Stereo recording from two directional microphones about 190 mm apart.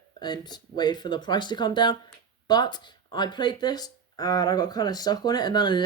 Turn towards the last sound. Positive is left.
turn(degrees=25)  # may be behind; listen again after turning